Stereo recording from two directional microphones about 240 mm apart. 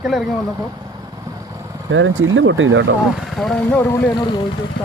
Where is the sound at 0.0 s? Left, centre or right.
Centre.